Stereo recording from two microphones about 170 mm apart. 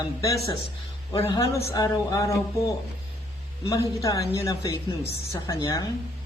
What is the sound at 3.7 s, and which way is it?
Speech, 20° left (ahead or behind).